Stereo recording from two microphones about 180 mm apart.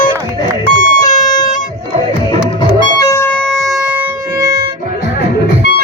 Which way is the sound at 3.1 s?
10° left (ahead or behind).